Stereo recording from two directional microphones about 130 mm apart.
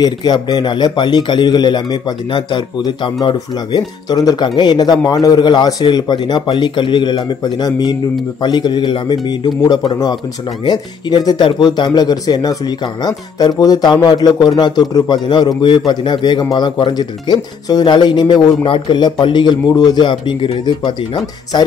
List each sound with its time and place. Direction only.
0.0 s a man's voice: 35° left (ahead or behind)